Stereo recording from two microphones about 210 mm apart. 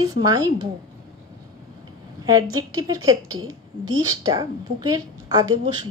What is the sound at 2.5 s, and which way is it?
Speech, 20° right (ahead or behind).